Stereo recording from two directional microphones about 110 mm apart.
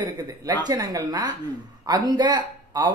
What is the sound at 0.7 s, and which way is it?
Speech, 35° right (ahead or behind).